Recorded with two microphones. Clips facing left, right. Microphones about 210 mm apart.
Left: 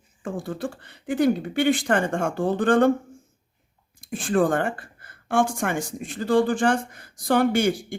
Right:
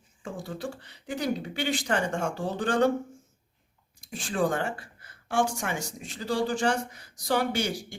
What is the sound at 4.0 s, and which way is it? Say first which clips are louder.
A woman's voice: left 6 dB; 55° left (ahead or behind).